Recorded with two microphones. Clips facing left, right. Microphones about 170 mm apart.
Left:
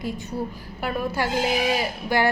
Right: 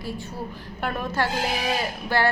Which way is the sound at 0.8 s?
10° left (ahead or behind).